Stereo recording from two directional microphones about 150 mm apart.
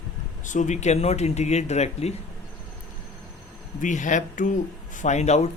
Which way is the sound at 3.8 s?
55° left (ahead or behind).